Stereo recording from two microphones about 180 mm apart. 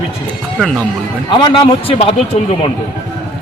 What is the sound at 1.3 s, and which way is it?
A man's voice, 25° left (ahead or behind).